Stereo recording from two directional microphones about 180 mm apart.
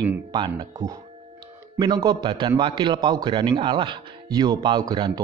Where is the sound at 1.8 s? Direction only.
25° right (ahead or behind).